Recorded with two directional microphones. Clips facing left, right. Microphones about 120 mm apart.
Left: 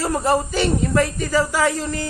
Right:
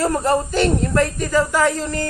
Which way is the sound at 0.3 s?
5° left (ahead or behind).